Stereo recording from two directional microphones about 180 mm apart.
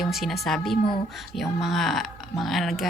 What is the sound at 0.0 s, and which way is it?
A woman's voice, centre (ahead or behind).